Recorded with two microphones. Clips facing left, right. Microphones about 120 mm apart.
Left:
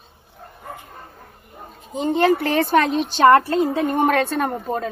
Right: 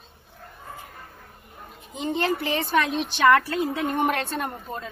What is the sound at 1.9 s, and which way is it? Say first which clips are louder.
Speech: left 8 dB; 50° left (ahead or behind).